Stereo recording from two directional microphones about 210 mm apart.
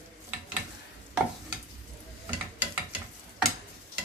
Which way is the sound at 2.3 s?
5° right (ahead or behind).